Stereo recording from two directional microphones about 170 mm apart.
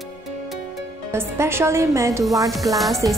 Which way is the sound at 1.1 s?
15° right (ahead or behind).